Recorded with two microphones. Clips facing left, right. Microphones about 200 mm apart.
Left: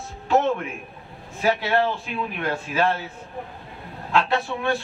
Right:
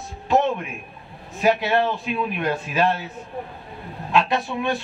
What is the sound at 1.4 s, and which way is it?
A man's voice, 20° right (ahead or behind).